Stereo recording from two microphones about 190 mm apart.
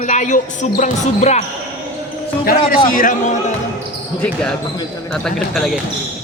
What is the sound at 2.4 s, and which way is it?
Speech, 50° left (ahead or behind).